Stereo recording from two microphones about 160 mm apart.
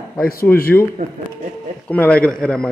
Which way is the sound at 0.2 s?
65° left (ahead or behind).